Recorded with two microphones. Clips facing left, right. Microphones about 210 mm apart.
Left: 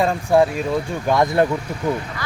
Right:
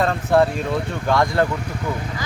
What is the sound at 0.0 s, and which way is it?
Speech, 10° left (ahead or behind).